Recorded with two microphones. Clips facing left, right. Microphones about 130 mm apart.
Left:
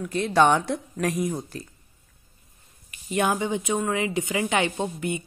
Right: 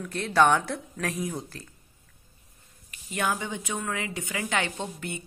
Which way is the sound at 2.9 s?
20° left (ahead or behind).